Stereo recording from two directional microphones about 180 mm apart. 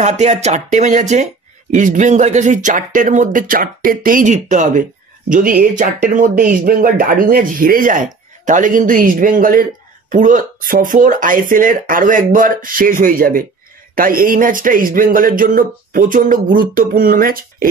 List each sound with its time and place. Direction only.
0.0 s speech: 40° right (ahead or behind)